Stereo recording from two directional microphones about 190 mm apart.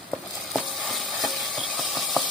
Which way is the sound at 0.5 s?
Centre (ahead or behind).